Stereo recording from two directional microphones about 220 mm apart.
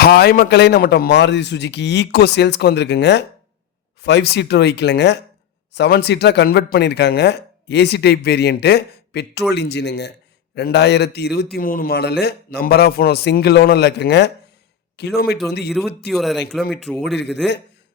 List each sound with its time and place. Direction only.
0.0 s speech: 45° left (ahead or behind)
16.0 s speech: centre (ahead or behind)